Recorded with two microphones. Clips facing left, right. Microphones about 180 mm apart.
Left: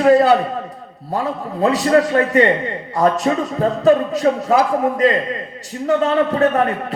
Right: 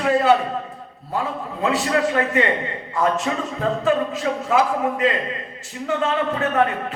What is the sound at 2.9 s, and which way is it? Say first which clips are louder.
A man's voice: left 5 dB; 35° left (ahead or behind).